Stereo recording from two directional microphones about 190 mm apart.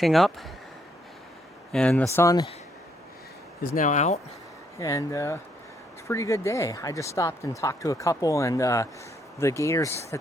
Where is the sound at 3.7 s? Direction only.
40° left (ahead or behind).